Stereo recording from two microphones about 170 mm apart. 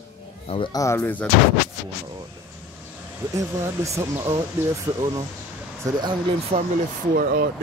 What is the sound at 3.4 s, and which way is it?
Speech, 20° right (ahead or behind).